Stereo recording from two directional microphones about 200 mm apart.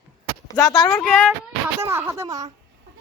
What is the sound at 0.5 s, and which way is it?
Speech, 15° left (ahead or behind).